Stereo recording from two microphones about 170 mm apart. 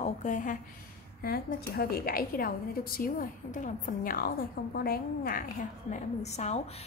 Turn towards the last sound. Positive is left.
turn(degrees=40)  # may be behind; listen again after turning